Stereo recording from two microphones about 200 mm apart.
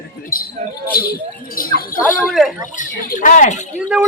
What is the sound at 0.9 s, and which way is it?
A woman's voice, 50° left (ahead or behind).